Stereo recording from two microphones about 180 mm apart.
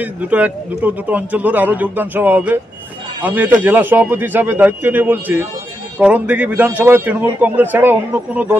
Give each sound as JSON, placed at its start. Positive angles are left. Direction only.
{"t": 0.0, "sound": "a man's voice", "side_deg": -10}